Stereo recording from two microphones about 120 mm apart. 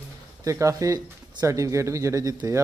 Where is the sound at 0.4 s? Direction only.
25° right (ahead or behind).